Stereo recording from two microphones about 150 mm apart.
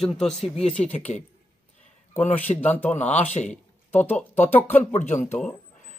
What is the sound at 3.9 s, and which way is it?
Speech, 15° left (ahead or behind).